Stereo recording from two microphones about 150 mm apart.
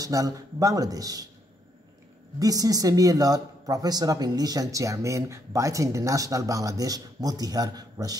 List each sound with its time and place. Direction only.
0.0 s speech: 25° right (ahead or behind)
2.3 s speech: 25° right (ahead or behind)